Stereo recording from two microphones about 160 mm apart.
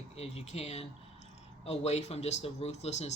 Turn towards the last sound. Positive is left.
turn(degrees=45)  # may be behind; listen again after turning